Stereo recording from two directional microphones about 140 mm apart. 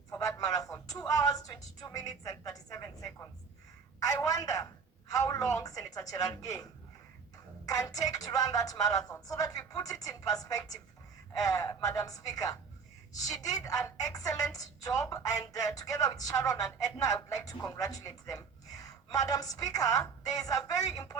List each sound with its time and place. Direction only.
0.1 s speech: 25° left (ahead or behind)